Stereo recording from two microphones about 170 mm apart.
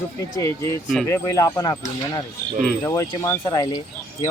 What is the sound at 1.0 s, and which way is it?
Speech, 15° left (ahead or behind).